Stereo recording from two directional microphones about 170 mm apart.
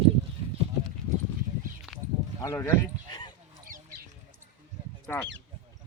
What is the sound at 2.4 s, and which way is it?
Speech, 15° left (ahead or behind).